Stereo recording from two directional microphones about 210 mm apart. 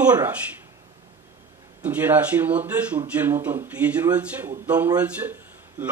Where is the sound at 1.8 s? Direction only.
5° right (ahead or behind).